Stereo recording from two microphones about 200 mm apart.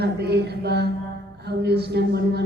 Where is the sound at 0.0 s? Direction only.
55° right (ahead or behind).